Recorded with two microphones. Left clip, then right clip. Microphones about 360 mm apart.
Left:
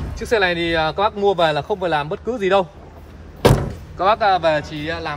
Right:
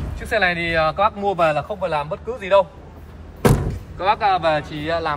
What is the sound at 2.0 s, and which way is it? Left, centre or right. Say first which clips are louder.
Speech: left 3 dB; centre.